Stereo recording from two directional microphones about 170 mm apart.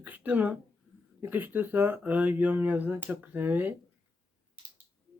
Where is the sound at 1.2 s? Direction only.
10° right (ahead or behind).